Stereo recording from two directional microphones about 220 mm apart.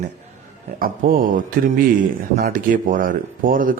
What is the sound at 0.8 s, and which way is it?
A man's voice, 40° right (ahead or behind).